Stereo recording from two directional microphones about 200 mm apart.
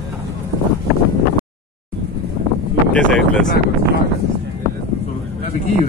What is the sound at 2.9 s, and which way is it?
Speech, 5° left (ahead or behind).